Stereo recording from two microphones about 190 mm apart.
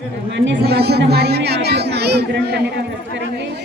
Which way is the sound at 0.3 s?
60° right (ahead or behind).